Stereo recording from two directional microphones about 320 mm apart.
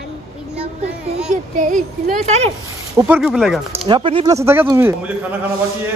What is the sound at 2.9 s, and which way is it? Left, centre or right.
Speech, centre.